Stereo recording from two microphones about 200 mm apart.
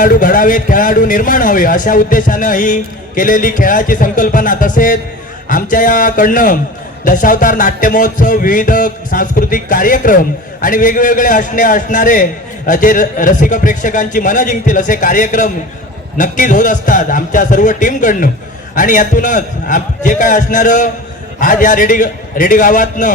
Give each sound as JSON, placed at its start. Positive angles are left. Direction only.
{"t": 0.0, "sound": "a man's voice", "side_deg": 40}